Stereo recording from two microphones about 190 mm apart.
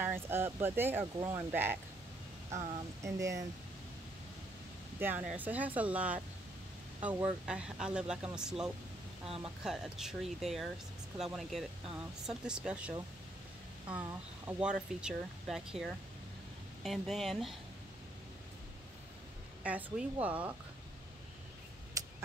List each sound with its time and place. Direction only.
0.0 s speech: 10° right (ahead or behind)
5.0 s speech: 10° right (ahead or behind)
14.6 s speech: 5° right (ahead or behind)
19.6 s speech: 10° right (ahead or behind)